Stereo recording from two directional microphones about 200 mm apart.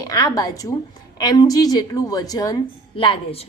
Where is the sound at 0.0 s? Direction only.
20° left (ahead or behind).